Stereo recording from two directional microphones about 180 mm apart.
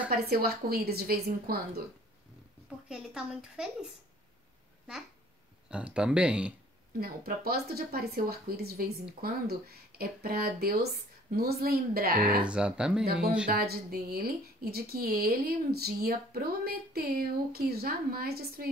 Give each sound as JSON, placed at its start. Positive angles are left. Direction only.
{"t": 0.1, "sound": "a woman's voice", "side_deg": -55}
{"t": 2.9, "sound": "speech", "side_deg": -5}
{"t": 5.7, "sound": "speech", "side_deg": -5}
{"t": 7.0, "sound": "a woman's voice", "side_deg": -55}
{"t": 12.4, "sound": "speech", "side_deg": -5}
{"t": 13.5, "sound": "a woman's voice", "side_deg": -55}